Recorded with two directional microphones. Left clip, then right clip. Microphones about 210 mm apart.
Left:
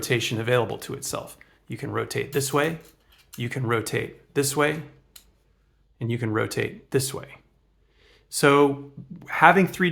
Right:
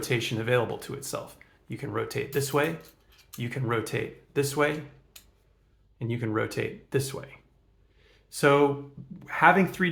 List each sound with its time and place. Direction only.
0.0 s speech: 30° left (ahead or behind)
6.0 s speech: 35° left (ahead or behind)
7.9 s a sound: 35° left (ahead or behind)
9.1 s speech: 35° left (ahead or behind)